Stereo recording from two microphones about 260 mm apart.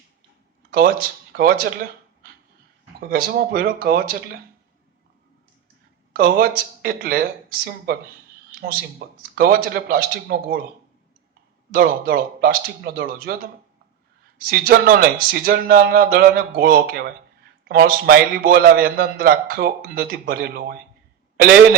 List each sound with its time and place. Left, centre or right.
0.7 s a man's voice: right
3.0 s a man's voice: right
6.1 s a man's voice: right
11.7 s a man's voice: right